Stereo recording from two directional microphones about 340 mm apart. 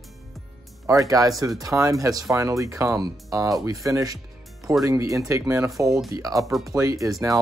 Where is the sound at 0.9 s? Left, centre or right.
Centre.